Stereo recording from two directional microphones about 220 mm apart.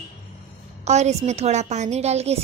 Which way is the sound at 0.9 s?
30° right (ahead or behind).